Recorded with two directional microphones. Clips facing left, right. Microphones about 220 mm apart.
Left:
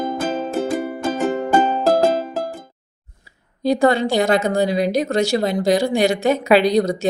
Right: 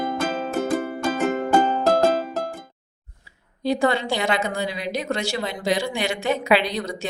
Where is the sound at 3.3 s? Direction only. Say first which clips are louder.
Left 4 dB; 40° left (ahead or behind).